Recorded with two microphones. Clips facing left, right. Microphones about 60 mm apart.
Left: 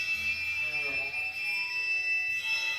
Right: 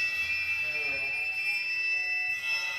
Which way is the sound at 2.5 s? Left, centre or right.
Right.